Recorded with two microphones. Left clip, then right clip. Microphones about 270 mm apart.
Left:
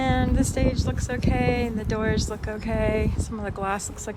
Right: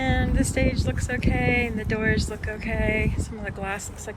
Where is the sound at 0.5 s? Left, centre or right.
Centre.